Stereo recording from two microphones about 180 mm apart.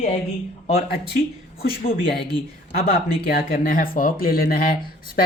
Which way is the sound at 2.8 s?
55° left (ahead or behind).